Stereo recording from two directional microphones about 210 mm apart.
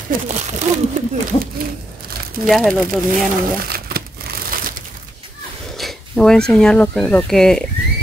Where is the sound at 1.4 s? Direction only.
45° right (ahead or behind).